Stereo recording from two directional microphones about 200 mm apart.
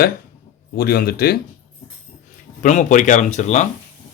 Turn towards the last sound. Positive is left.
turn(degrees=35)  # may be behind; listen again after turning